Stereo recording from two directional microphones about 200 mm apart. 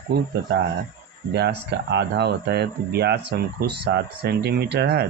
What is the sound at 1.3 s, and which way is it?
Speech, 55° right (ahead or behind).